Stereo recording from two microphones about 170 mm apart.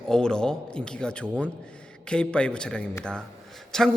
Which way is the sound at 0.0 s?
5° left (ahead or behind).